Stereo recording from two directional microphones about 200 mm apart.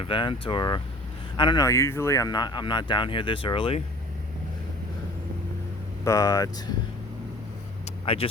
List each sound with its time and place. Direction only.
0.0 s speech: 25° left (ahead or behind)
6.1 s speech: 15° left (ahead or behind)
8.0 s speech: 30° left (ahead or behind)